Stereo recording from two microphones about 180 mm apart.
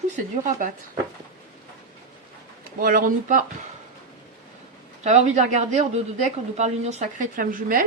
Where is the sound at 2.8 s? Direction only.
50° right (ahead or behind).